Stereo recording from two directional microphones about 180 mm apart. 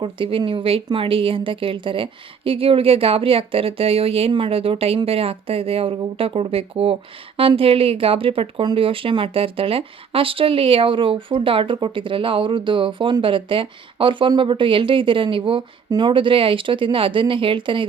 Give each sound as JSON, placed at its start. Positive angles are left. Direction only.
{"t": 0.0, "sound": "speech", "side_deg": -30}